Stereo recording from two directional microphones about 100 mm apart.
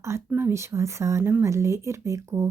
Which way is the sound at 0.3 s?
25° right (ahead or behind).